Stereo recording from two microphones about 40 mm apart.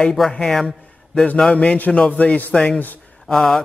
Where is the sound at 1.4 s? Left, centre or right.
Left.